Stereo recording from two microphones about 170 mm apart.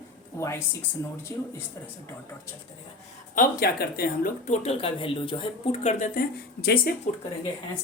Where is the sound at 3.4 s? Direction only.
65° left (ahead or behind).